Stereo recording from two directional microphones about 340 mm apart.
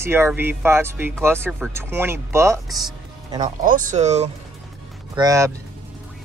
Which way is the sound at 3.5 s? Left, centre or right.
Right.